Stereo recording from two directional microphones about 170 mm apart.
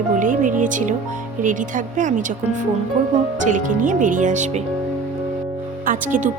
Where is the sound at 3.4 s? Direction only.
50° right (ahead or behind).